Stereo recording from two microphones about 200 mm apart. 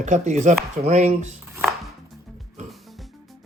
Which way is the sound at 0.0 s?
35° right (ahead or behind).